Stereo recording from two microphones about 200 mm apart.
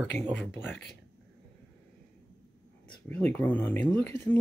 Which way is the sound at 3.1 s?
10° left (ahead or behind).